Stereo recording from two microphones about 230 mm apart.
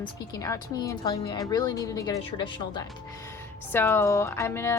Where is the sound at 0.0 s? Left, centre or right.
Centre.